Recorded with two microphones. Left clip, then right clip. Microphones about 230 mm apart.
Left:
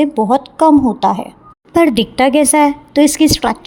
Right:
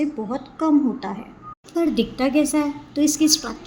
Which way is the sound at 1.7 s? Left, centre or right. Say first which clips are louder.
Left 10 dB; left.